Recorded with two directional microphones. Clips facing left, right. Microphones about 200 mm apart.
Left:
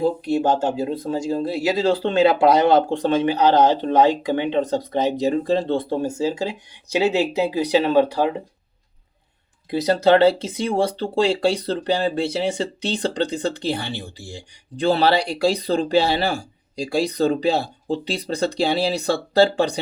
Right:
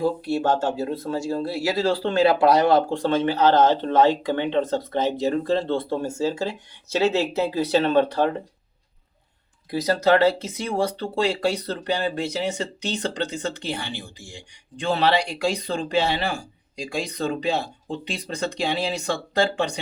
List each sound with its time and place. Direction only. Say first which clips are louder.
0.0 s speech: left 3 dB; 15° left (ahead or behind)
9.6 s speech: left 3 dB; 25° left (ahead or behind)